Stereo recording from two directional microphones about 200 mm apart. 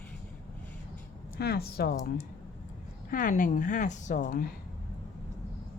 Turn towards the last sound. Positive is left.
turn(degrees=45)  # may be behind; listen again after turning